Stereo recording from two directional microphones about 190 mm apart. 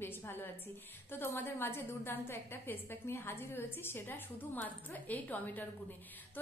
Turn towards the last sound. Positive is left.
turn(degrees=10)  # may be behind; listen again after turning